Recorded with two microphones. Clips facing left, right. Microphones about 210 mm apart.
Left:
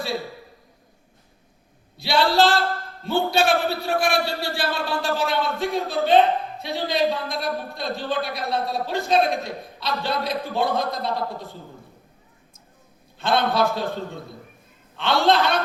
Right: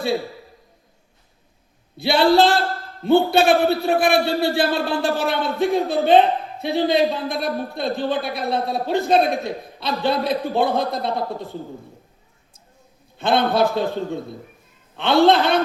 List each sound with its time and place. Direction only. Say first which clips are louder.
2.0 s a man's voice: right 4 dB; 55° right (ahead or behind)
13.1 s a man's voice: right 3 dB; 55° right (ahead or behind)
14.9 s a man's voice: right 5 dB; 55° right (ahead or behind)